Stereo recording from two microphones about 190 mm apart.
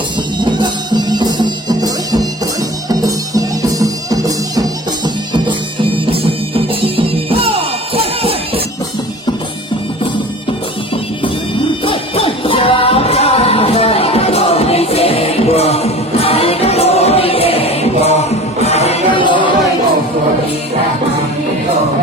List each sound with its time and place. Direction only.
0.4 s music: 25° right (ahead or behind)
11.9 s music: 30° left (ahead or behind)